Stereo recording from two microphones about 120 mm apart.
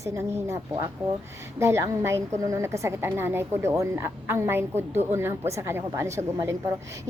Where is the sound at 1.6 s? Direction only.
25° right (ahead or behind).